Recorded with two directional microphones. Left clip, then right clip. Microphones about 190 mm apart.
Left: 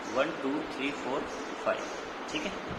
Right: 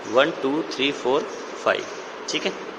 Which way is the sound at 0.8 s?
35° right (ahead or behind).